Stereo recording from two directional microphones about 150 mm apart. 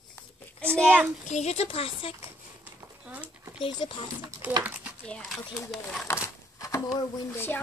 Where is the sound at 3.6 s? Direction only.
35° left (ahead or behind).